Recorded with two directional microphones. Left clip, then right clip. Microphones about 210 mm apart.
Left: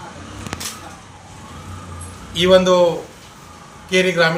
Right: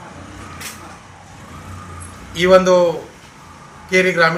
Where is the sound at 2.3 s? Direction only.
5° right (ahead or behind).